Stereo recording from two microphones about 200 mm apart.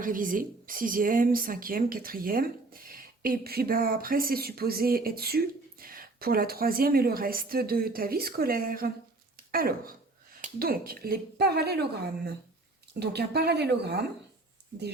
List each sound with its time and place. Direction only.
0.0 s a woman's voice: 45° right (ahead or behind)